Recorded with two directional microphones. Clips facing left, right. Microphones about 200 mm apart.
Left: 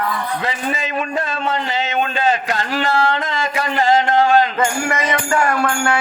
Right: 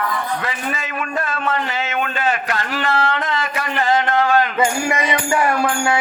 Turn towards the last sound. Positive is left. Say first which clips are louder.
# even
turn(degrees=-15)  # may be behind; listen again after turning